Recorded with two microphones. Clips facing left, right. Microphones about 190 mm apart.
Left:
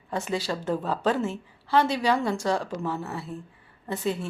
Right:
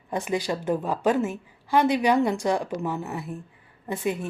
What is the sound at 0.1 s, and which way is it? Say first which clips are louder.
A woman's voice: right 2 dB; 15° right (ahead or behind).